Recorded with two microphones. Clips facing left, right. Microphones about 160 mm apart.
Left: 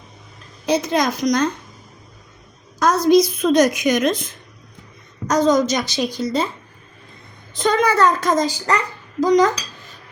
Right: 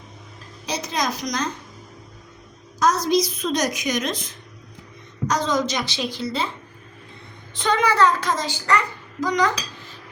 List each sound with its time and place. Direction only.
0.6 s a woman's voice: 55° left (ahead or behind)
2.7 s a woman's voice: 55° left (ahead or behind)
7.5 s speech: 40° left (ahead or behind)